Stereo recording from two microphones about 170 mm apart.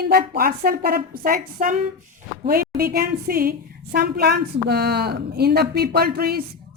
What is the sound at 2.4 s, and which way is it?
A woman's voice, 60° right (ahead or behind).